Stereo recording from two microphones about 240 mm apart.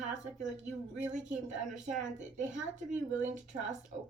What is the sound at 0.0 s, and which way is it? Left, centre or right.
Speech, right.